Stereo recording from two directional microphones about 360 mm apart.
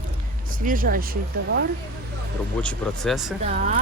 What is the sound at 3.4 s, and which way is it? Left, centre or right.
Speech, centre.